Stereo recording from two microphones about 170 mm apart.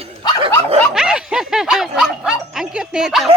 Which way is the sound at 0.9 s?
5° right (ahead or behind).